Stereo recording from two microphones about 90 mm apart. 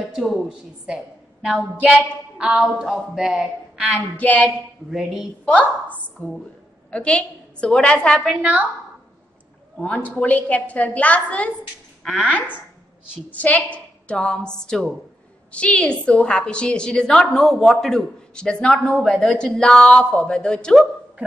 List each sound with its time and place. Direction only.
0.1 s a woman's voice: centre (ahead or behind)
4.2 s a woman's voice: 20° left (ahead or behind)
4.9 s a woman's voice: 5° right (ahead or behind)
5.4 s a woman's voice: 15° left (ahead or behind)
8.4 s a woman's voice: 15° right (ahead or behind)
9.8 s a woman's voice: 15° left (ahead or behind)